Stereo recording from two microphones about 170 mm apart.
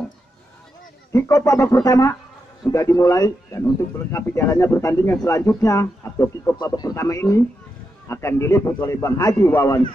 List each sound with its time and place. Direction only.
1.1 s speech: 20° left (ahead or behind)